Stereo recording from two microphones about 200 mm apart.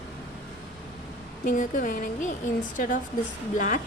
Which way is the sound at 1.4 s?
40° left (ahead or behind).